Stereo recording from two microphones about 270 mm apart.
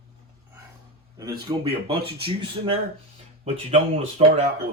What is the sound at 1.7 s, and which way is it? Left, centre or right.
Speech, right.